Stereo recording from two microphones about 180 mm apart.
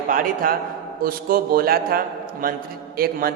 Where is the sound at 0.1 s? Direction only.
50° right (ahead or behind).